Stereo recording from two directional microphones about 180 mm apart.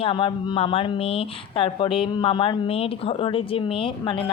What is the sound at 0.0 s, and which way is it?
A woman's voice, 30° left (ahead or behind).